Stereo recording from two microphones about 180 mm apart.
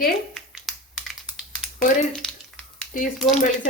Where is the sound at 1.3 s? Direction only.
5° right (ahead or behind).